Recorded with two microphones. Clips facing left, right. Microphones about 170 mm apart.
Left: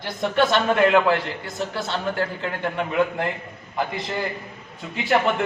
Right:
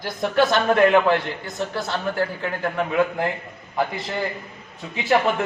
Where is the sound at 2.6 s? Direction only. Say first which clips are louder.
Right 1 dB; 5° right (ahead or behind).